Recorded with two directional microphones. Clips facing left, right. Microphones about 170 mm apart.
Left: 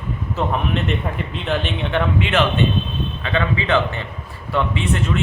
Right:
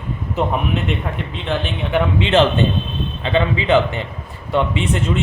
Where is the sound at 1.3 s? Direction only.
Centre (ahead or behind).